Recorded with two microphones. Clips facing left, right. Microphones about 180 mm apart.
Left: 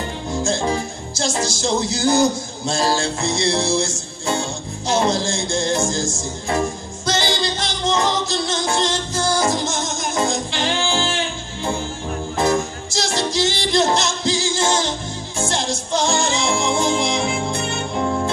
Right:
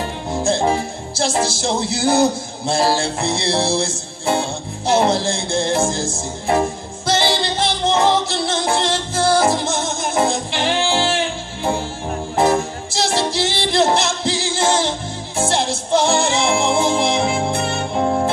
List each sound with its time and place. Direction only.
0.5 s music: 30° right (ahead or behind)
2.0 s a man's voice: 60° right (ahead or behind)
2.7 s music: 30° right (ahead or behind)
7.1 s music: 30° right (ahead or behind)
12.4 s music: 30° right (ahead or behind)
16.0 s music: 60° right (ahead or behind)
16.6 s music: 30° right (ahead or behind)
17.0 s music: 60° right (ahead or behind)
17.6 s music: 30° right (ahead or behind)